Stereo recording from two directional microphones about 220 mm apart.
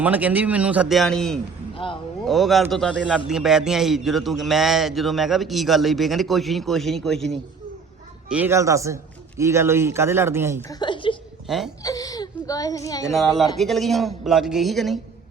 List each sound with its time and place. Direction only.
0.0 s a man's voice: 5° right (ahead or behind)
1.7 s a sound: 25° left (ahead or behind)
2.2 s a man's voice: centre (ahead or behind)
8.3 s a man's voice: 10° right (ahead or behind)
10.6 s a sound: 15° left (ahead or behind)
11.4 s speech: centre (ahead or behind)
11.8 s speech: 15° left (ahead or behind)
13.1 s a man's voice: centre (ahead or behind)